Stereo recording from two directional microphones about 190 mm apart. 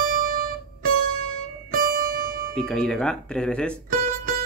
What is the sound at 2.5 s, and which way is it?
Speech, 5° left (ahead or behind).